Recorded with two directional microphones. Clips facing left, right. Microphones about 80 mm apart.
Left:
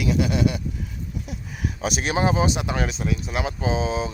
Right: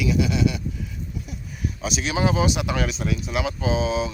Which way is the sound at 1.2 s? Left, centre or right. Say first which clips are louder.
Left 2 dB; left.